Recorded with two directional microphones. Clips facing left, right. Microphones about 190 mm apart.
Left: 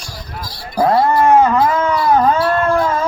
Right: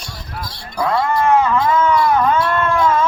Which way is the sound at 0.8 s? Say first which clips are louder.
Left 4 dB; 40° left (ahead or behind).